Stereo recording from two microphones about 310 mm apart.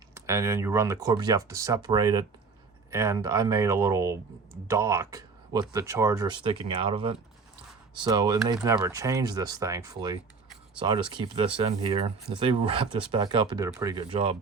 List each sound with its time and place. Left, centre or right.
0.1 s speech: centre